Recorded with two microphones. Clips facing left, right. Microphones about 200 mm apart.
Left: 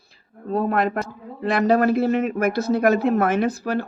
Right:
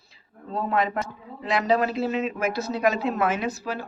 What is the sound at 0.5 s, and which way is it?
A man's voice, 60° left (ahead or behind).